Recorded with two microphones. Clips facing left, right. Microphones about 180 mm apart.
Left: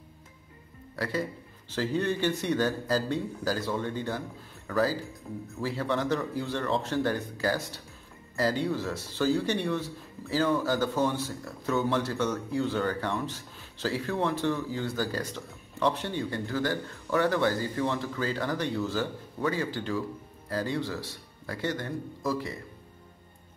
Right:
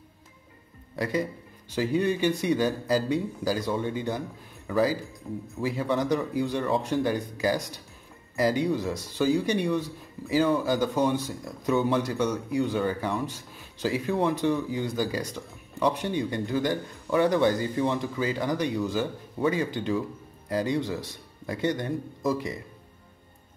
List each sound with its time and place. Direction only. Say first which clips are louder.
0.9 s speech: right 3 dB; 15° right (ahead or behind)
5.2 s speech: right 6 dB; centre (ahead or behind)
5.6 s speech: right 3 dB; 15° right (ahead or behind)